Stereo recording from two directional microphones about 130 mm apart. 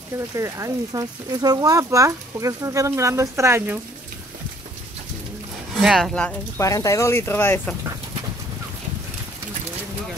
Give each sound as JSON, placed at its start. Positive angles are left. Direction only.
{"t": 0.4, "sound": "speech", "side_deg": -25}
{"t": 5.8, "sound": "speech", "side_deg": 0}
{"t": 6.6, "sound": "speech", "side_deg": 25}